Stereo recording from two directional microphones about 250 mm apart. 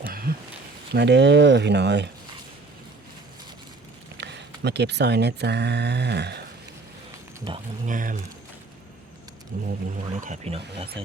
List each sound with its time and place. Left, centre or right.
0.0 s a sound: right
0.9 s speech: right
4.2 s speech: right
7.5 s speech: centre
7.9 s speech: right
9.5 s speech: right